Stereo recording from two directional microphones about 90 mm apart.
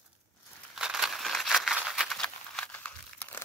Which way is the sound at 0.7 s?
5° right (ahead or behind).